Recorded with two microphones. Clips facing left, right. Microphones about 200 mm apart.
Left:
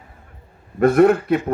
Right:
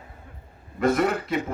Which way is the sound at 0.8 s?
60° left (ahead or behind).